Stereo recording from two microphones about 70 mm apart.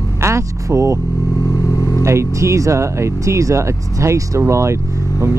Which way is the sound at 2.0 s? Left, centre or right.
Right.